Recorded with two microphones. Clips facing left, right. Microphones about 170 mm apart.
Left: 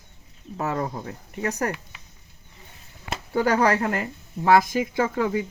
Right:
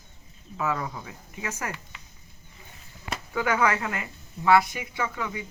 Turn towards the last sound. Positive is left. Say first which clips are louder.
# left 8 dB
turn(degrees=50)  # may be behind; listen again after turning